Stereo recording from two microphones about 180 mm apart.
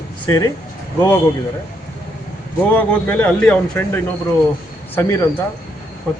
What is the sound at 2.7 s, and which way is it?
Speech, 10° left (ahead or behind).